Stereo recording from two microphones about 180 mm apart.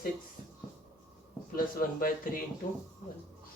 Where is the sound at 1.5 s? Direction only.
55° left (ahead or behind).